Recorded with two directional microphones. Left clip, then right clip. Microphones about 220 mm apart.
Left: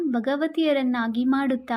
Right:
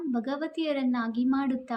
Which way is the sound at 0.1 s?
35° left (ahead or behind).